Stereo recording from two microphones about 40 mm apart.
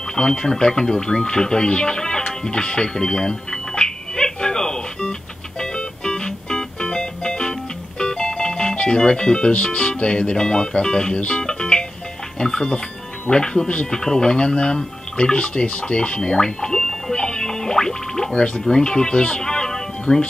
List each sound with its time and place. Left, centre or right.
0.1 s a sound: centre
5.6 s organ: left
8.0 s music: centre
8.7 s speech: left
11.4 s music: centre
12.4 s speech: centre
18.3 s speech: left
18.6 s speech: centre